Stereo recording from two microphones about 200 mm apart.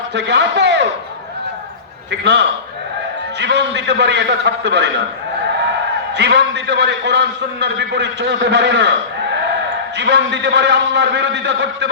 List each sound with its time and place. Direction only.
0.1 s a man's voice: 60° right (ahead or behind)
2.0 s a man's voice: 60° right (ahead or behind)
6.1 s a man's voice: 60° right (ahead or behind)